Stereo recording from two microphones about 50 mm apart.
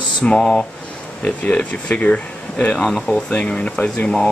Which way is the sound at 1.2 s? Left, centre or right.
Left.